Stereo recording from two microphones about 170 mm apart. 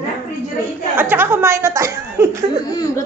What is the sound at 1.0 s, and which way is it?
Speech, 10° right (ahead or behind).